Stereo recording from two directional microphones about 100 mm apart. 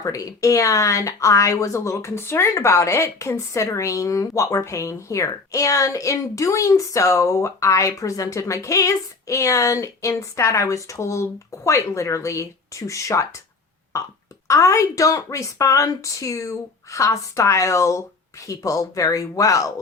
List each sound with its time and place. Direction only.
0.0 s speech: 35° left (ahead or behind)